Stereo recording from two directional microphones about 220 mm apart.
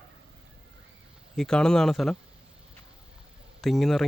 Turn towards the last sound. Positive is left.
turn(degrees=0)  # may be behind; listen again after turning